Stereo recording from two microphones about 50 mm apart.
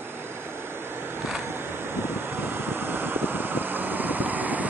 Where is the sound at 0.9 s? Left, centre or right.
Right.